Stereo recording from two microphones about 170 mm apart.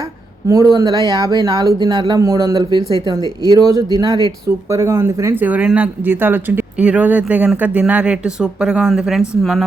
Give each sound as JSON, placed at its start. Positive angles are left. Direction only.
{"t": 0.4, "sound": "speech", "side_deg": -20}